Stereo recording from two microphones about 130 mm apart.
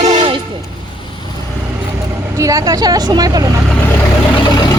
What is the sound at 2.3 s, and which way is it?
Speech, 25° right (ahead or behind).